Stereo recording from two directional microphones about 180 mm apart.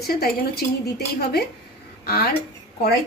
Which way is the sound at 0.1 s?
60° left (ahead or behind).